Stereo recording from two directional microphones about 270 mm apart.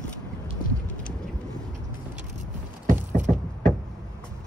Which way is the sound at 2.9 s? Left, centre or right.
Right.